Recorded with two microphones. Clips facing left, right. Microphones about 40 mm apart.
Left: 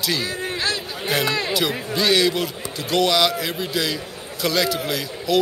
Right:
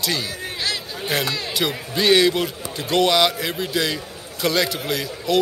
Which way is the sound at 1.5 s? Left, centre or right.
Centre.